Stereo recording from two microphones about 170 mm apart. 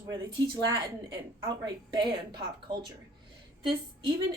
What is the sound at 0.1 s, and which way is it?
A woman's voice, 20° right (ahead or behind).